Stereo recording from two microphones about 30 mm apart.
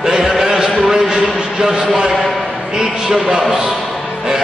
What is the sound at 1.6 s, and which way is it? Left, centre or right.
Speech, right.